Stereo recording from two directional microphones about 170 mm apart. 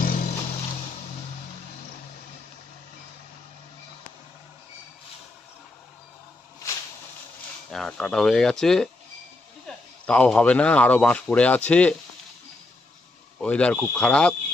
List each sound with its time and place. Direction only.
0.0 s vehicle: 55° left (ahead or behind)
7.7 s speech: centre (ahead or behind)
10.0 s speech: 5° left (ahead or behind)
13.4 s speech: 5° left (ahead or behind)